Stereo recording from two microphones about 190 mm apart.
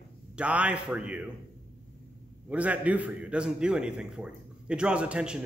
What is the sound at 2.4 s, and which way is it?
A man's voice, 5° right (ahead or behind).